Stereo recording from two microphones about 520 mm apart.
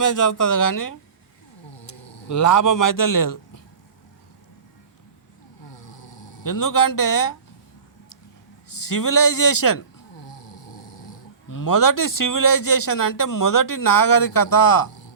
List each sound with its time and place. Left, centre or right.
0.0 s a man's voice: left
5.7 s vehicle: left
6.4 s a man's voice: left
8.7 s a man's voice: left
10.2 s a sound: left
11.4 s a man's voice: left